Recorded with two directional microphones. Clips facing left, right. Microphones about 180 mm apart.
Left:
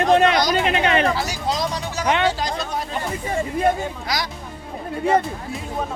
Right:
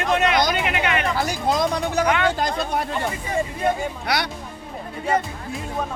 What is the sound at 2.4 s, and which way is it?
Speech, 55° right (ahead or behind).